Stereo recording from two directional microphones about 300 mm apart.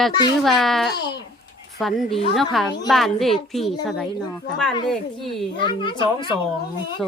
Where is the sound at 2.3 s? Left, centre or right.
Centre.